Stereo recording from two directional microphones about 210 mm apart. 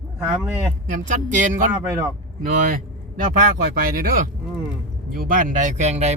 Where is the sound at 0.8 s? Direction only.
35° right (ahead or behind).